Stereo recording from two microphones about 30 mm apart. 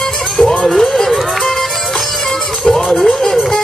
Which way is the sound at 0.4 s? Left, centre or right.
Centre.